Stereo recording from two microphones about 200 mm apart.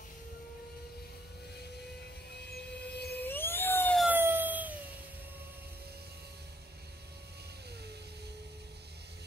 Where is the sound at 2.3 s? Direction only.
55° left (ahead or behind).